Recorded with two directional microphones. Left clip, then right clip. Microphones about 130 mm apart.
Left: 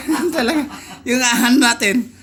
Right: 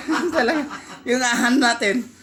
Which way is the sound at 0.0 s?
25° left (ahead or behind).